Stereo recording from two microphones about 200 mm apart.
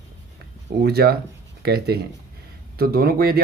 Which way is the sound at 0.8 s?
50° right (ahead or behind).